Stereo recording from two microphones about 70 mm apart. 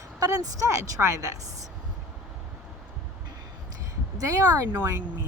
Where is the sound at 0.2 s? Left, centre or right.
Right.